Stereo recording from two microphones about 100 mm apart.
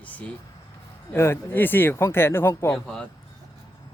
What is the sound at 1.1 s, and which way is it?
Speech, 25° left (ahead or behind).